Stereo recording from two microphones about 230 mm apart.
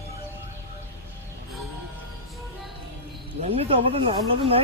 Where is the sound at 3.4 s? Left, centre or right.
Right.